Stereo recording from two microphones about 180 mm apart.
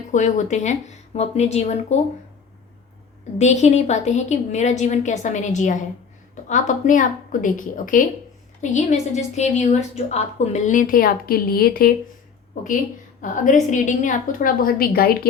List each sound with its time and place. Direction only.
0.1 s a woman's voice: 40° left (ahead or behind)
3.3 s a woman's voice: 40° left (ahead or behind); by 15.3 s 55° left (ahead or behind)